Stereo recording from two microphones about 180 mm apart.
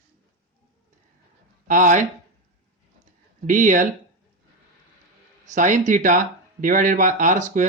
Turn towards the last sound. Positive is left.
turn(degrees=-45)  # may be behind; listen again after turning